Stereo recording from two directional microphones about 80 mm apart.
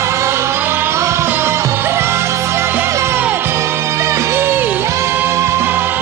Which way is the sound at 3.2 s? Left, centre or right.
Right.